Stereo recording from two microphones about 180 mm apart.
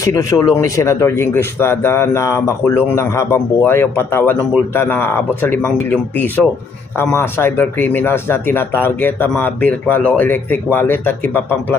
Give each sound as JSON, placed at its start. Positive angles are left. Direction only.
{"t": 0.0, "sound": "speech", "side_deg": 20}